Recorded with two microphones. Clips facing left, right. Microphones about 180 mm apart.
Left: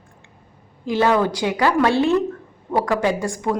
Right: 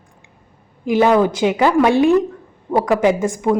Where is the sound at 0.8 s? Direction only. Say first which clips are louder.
Right 4 dB; 15° right (ahead or behind).